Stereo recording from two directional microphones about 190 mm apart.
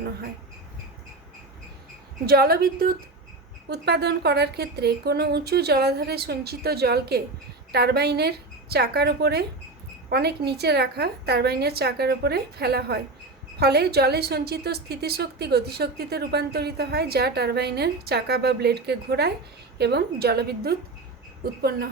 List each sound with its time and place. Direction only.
2.2 s a woman's voice: 55° right (ahead or behind)